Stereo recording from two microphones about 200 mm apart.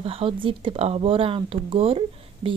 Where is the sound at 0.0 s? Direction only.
30° right (ahead or behind).